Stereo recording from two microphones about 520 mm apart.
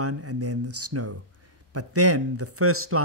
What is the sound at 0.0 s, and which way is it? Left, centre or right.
Speech, right.